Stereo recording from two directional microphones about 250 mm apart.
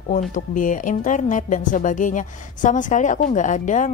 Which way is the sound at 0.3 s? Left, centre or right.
Left.